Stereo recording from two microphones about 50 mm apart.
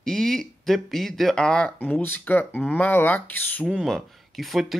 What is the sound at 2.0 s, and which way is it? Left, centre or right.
Speech, left.